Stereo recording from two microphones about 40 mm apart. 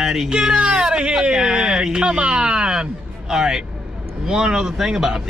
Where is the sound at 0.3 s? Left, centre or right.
Centre.